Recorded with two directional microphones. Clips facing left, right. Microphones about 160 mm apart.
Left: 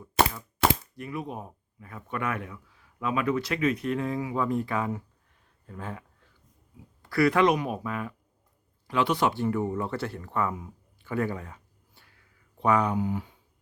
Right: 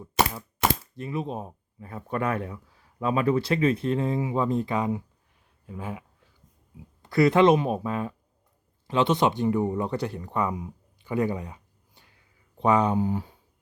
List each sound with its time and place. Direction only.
0.9 s speech: 25° right (ahead or behind)
7.0 s speech: 20° right (ahead or behind)